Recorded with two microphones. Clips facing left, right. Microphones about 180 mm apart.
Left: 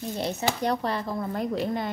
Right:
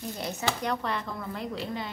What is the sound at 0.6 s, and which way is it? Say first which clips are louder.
Speech: left 4 dB; 35° left (ahead or behind).